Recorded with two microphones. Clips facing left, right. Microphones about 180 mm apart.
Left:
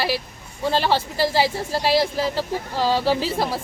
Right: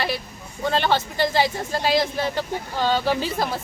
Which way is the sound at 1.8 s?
35° left (ahead or behind).